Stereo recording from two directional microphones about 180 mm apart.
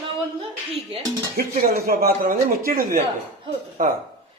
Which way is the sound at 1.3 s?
55° right (ahead or behind).